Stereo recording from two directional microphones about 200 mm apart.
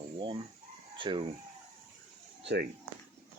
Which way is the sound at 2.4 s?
55° right (ahead or behind).